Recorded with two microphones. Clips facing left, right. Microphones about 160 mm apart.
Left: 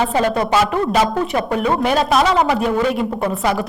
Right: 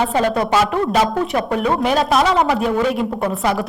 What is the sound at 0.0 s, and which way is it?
A woman's voice, centre (ahead or behind).